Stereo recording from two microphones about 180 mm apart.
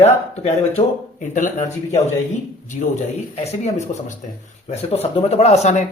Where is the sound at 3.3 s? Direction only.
35° left (ahead or behind).